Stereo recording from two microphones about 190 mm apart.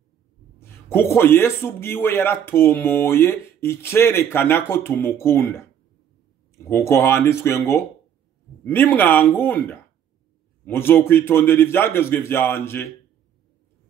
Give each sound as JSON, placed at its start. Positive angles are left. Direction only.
{"t": 0.6, "sound": "a man's voice", "side_deg": 10}
{"t": 6.7, "sound": "a man's voice", "side_deg": 15}